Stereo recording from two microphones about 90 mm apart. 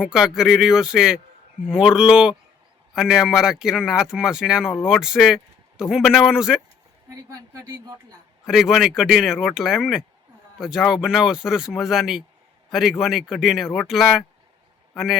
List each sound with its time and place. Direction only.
0.0 s a man's voice: 5° right (ahead or behind)
7.1 s a woman's voice: 30° right (ahead or behind)
8.4 s a man's voice: 5° right (ahead or behind)